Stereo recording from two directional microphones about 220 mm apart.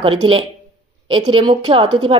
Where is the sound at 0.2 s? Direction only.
25° right (ahead or behind).